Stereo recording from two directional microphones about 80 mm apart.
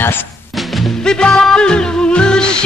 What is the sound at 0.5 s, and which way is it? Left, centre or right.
Music, centre.